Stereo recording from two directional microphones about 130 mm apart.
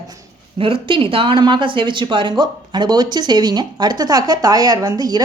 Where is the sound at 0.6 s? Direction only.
40° right (ahead or behind).